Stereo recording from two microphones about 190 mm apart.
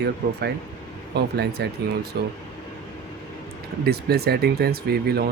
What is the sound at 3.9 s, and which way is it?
Speech, 55° right (ahead or behind).